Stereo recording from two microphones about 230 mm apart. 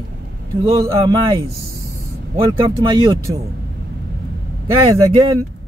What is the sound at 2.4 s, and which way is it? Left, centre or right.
Speech, right.